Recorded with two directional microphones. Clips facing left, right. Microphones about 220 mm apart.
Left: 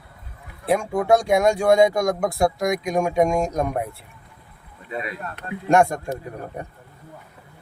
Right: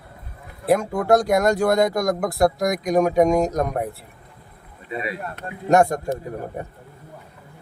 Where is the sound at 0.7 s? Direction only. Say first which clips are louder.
Right 1 dB; centre (ahead or behind).